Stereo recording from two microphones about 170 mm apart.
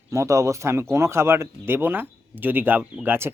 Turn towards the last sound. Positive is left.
turn(degrees=-15)  # may be behind; listen again after turning